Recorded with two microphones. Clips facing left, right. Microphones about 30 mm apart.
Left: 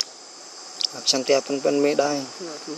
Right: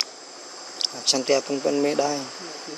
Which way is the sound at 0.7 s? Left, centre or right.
Centre.